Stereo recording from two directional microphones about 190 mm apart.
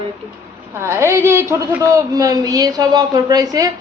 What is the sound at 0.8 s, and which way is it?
A man's voice, 15° right (ahead or behind).